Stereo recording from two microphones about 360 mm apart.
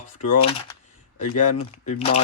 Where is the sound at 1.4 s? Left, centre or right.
Left.